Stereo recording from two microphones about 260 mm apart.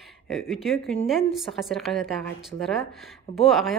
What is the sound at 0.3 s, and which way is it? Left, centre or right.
Speech, centre.